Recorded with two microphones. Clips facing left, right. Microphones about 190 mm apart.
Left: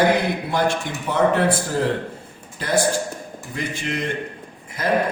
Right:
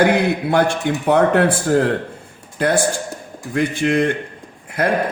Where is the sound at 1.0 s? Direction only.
60° right (ahead or behind).